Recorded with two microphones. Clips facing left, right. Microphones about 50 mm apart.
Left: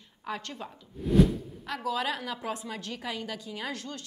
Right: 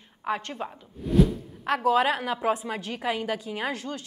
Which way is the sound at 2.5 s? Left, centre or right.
Right.